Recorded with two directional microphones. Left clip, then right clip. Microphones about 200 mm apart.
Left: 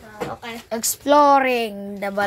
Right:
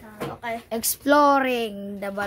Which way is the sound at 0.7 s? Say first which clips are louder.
Left 3 dB; 10° right (ahead or behind).